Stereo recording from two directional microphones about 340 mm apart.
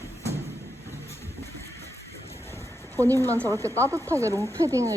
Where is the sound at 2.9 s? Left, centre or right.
Centre.